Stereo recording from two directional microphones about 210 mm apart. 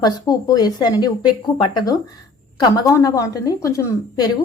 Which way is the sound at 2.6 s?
15° left (ahead or behind).